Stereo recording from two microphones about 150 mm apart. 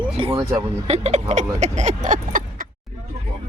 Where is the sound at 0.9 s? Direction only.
45° right (ahead or behind).